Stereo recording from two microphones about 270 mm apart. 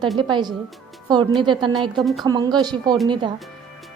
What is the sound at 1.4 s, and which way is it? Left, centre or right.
Speech, centre.